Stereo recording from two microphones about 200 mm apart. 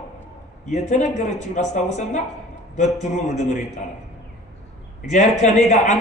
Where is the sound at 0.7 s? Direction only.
35° left (ahead or behind).